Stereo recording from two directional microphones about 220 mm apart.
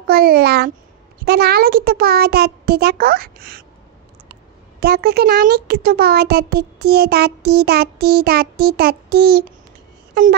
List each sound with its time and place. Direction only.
0.0 s a child's voice: 45° right (ahead or behind)
4.7 s a child's voice: 45° right (ahead or behind)